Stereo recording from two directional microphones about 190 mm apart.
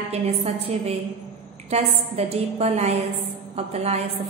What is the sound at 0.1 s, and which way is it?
A woman's voice, 30° right (ahead or behind).